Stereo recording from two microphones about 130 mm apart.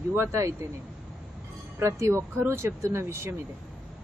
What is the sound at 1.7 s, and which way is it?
Speech, 20° right (ahead or behind).